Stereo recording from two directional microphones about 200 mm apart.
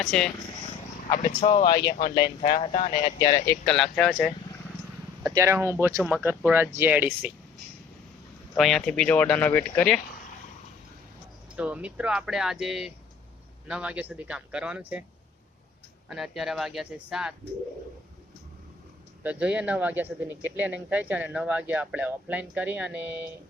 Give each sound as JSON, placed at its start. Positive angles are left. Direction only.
{"t": 0.0, "sound": "speech", "side_deg": 0}
{"t": 1.1, "sound": "speech", "side_deg": 20}
{"t": 5.2, "sound": "speech", "side_deg": -15}
{"t": 8.5, "sound": "speech", "side_deg": 0}
{"t": 11.5, "sound": "speech", "side_deg": -5}
{"t": 16.0, "sound": "speech", "side_deg": 0}
{"t": 19.2, "sound": "speech", "side_deg": -5}